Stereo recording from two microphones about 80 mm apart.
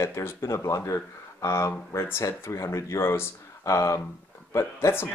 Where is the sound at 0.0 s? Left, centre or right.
Left.